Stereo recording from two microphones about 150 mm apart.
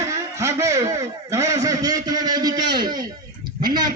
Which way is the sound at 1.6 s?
25° right (ahead or behind).